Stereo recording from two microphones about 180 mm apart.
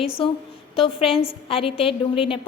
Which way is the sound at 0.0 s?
30° left (ahead or behind).